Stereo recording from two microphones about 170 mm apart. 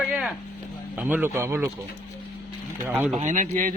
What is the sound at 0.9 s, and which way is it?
Speech, 10° right (ahead or behind).